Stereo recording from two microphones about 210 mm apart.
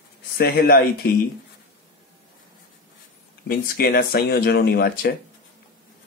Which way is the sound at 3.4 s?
45° left (ahead or behind).